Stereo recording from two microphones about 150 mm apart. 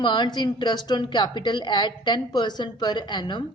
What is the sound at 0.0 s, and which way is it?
Speech, 30° left (ahead or behind).